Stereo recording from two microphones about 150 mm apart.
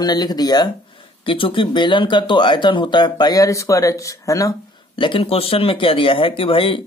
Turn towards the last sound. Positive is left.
turn(degrees=35)  # may be behind; listen again after turning